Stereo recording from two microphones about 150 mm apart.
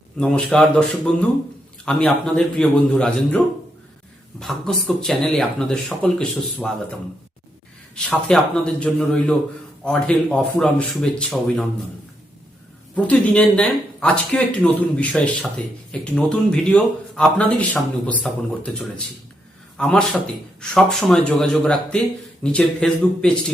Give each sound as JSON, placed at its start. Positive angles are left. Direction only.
{"t": 0.2, "sound": "speech", "side_deg": 5}
{"t": 7.9, "sound": "speech", "side_deg": 5}
{"t": 13.0, "sound": "speech", "side_deg": 10}